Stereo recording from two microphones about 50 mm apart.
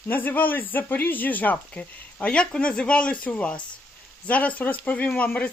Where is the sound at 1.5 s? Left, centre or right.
Left.